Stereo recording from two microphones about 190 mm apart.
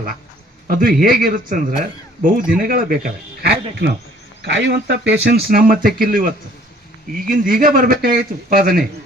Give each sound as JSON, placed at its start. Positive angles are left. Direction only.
{"t": 0.7, "sound": "speech", "side_deg": -50}
{"t": 4.4, "sound": "speech", "side_deg": -65}